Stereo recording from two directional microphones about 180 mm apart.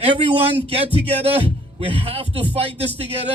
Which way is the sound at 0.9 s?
35° right (ahead or behind).